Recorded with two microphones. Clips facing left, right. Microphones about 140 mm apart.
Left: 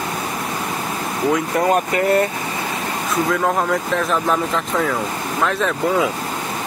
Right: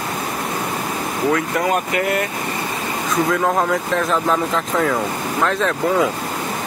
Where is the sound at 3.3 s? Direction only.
Centre (ahead or behind).